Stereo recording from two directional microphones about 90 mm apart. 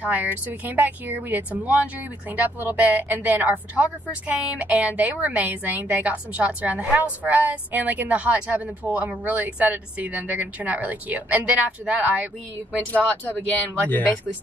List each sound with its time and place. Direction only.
0.0 s speech: 20° right (ahead or behind)
12.7 s speech: 15° left (ahead or behind)